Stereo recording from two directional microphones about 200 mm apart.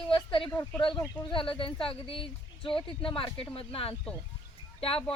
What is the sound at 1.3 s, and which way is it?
Speech, 25° left (ahead or behind).